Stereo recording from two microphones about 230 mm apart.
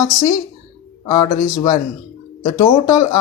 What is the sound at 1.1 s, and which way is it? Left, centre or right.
Speech, centre.